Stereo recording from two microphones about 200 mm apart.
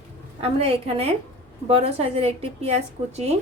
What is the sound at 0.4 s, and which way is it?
A woman's voice, 30° right (ahead or behind).